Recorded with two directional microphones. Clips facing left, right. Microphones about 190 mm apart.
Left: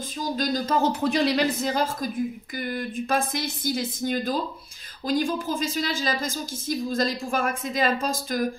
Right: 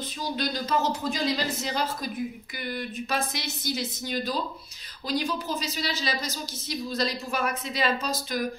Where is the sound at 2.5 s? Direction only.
45° left (ahead or behind).